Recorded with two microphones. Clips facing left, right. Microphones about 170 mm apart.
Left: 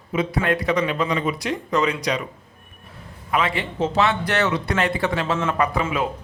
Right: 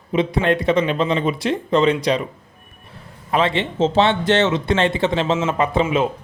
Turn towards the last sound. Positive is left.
turn(degrees=-25)  # may be behind; listen again after turning